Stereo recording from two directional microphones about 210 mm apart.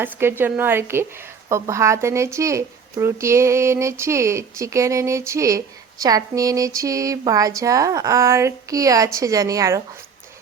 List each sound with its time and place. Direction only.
0.0 s speech: 10° right (ahead or behind)